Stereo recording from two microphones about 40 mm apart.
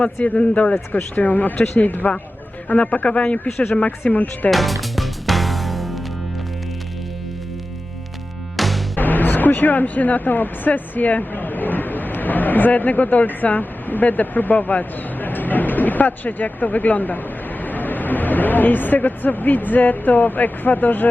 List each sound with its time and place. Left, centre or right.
0.0 s a man's voice: left
0.9 s speech: left
2.6 s a man's voice: left
4.1 s a man's voice: left
4.5 s music: centre
8.5 s music: centre
9.0 s speech: left